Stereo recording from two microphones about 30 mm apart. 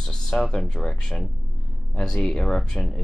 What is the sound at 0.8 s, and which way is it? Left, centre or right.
Speech, left.